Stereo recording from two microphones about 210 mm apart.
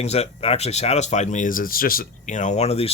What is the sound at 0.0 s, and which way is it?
Speech, 30° left (ahead or behind).